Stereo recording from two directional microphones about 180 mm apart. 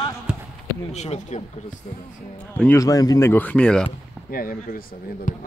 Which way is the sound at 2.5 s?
15° left (ahead or behind).